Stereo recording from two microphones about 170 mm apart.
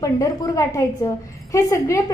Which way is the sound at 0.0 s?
20° left (ahead or behind).